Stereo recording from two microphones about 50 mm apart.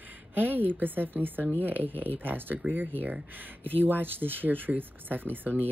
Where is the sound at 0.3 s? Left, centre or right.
Right.